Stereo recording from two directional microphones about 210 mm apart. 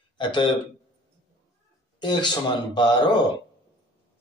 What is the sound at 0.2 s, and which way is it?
Speech, 20° left (ahead or behind).